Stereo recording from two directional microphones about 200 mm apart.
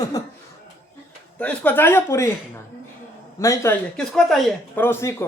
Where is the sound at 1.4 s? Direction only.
5° left (ahead or behind).